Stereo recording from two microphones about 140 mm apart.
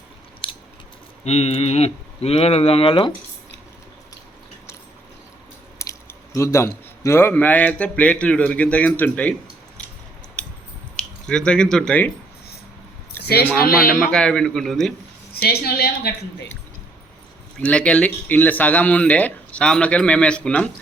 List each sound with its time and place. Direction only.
0.4 s biting: 40° left (ahead or behind)
1.2 s speech: 50° left (ahead or behind)
5.8 s a man's voice: 20° left (ahead or behind)
10.9 s speech: 5° left (ahead or behind)
13.6 s a woman's voice: 90° left
14.0 s a man's voice: 5° left (ahead or behind)
15.4 s a woman's voice: 90° left
17.6 s speech: 10° left (ahead or behind)